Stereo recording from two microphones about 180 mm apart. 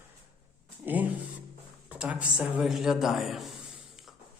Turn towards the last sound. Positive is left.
turn(degrees=0)  # may be behind; listen again after turning